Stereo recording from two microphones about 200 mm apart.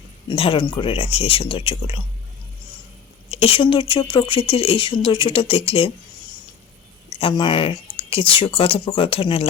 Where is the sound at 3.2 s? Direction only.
30° left (ahead or behind).